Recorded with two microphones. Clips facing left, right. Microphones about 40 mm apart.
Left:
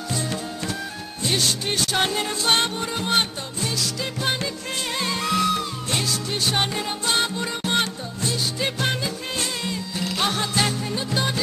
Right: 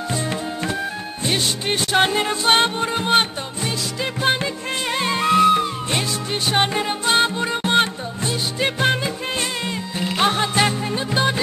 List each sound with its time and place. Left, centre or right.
0.1 s music: right